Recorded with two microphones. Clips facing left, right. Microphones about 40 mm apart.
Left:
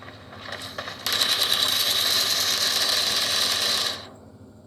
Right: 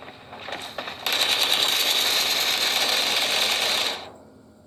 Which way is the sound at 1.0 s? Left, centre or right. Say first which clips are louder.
Right 1 dB; right.